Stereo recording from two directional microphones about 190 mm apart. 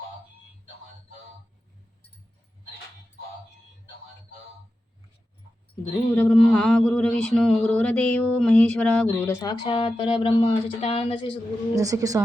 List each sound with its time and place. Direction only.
6.1 s mantra: 5° left (ahead or behind)
9.0 s speech: 10° left (ahead or behind); by 11.3 s 30° left (ahead or behind)
11.7 s a woman's voice: 20° right (ahead or behind)